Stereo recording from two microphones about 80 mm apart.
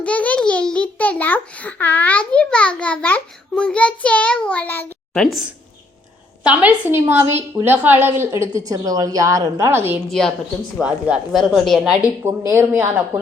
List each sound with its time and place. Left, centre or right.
0.0 s a child's voice: centre
5.1 s a child's voice: centre
6.4 s a woman's voice: centre
10.1 s a child's voice: centre
10.8 s speech: centre
11.3 s speech: centre
12.2 s a woman's voice: right